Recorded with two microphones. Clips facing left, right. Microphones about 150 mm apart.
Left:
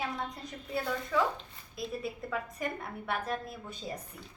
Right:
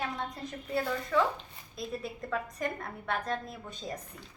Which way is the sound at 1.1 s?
5° left (ahead or behind).